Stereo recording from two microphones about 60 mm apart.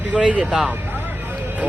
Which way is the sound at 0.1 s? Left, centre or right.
Centre.